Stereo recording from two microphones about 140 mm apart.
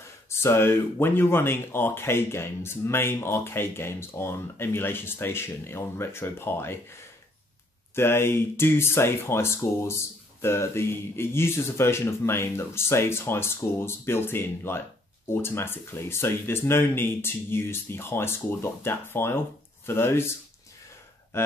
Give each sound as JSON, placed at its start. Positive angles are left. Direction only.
{"t": 0.3, "sound": "speech", "side_deg": 20}
{"t": 7.9, "sound": "speech", "side_deg": 15}